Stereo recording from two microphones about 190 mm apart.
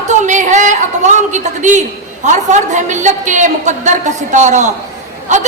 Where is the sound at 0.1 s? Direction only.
40° right (ahead or behind).